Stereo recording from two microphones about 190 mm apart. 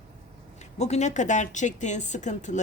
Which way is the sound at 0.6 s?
35° left (ahead or behind).